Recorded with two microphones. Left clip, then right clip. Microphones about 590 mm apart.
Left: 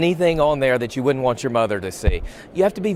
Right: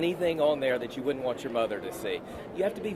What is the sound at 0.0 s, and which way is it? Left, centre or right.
Speech, left.